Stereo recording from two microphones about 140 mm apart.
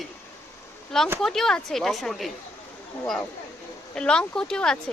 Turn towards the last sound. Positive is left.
turn(degrees=5)  # may be behind; listen again after turning